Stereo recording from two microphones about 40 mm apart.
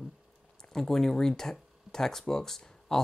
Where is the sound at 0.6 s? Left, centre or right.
Centre.